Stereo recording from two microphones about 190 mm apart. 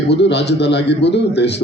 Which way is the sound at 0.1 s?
65° left (ahead or behind).